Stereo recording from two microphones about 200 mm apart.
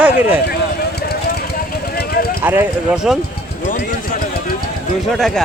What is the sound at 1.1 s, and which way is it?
Vehicle, 50° left (ahead or behind).